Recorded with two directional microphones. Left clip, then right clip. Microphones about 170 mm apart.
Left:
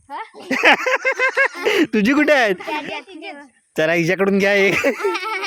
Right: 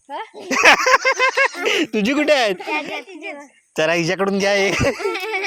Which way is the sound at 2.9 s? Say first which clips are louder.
Right 1 dB; 10° right (ahead or behind).